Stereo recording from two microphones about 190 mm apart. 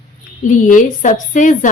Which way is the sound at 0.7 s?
40° left (ahead or behind).